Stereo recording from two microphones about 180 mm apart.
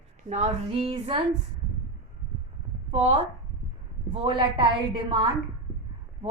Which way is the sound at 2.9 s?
35° right (ahead or behind).